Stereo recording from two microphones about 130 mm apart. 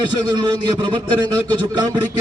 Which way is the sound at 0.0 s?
35° right (ahead or behind).